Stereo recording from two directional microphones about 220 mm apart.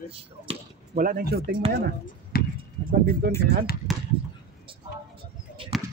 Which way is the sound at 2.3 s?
45° left (ahead or behind).